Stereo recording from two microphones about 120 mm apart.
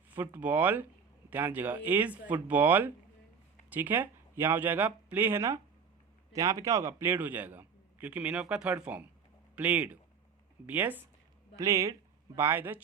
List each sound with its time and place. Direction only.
0.3 s a man's voice: 15° right (ahead or behind)
6.3 s a man's voice: 25° right (ahead or behind)
11.5 s speech: 25° right (ahead or behind)
12.4 s a man's voice: 15° right (ahead or behind)